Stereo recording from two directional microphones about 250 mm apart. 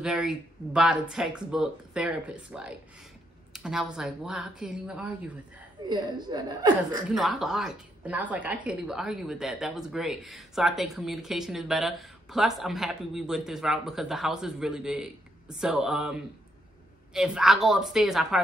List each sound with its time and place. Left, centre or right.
0.0 s a woman's voice: centre
5.9 s speech: centre
7.1 s a woman's voice: centre